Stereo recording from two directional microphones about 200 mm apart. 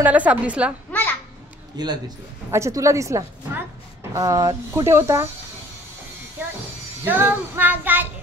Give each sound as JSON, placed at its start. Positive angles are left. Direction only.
{"t": 0.0, "sound": "a woman's voice", "side_deg": -5}
{"t": 1.8, "sound": "a woman's voice", "side_deg": -20}
{"t": 7.1, "sound": "a woman's voice", "side_deg": -10}